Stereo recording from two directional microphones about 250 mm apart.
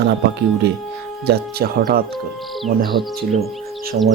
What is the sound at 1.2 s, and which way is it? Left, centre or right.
Speech, right.